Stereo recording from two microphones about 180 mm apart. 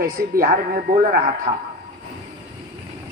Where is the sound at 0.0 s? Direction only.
55° right (ahead or behind).